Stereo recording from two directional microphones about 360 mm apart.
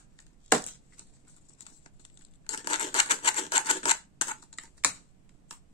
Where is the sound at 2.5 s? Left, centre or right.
Centre.